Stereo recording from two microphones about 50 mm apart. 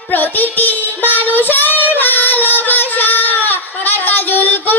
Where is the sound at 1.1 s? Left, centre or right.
Left.